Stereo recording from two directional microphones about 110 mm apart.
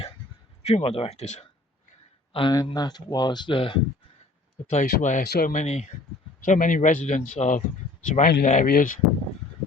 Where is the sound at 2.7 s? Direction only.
35° left (ahead or behind).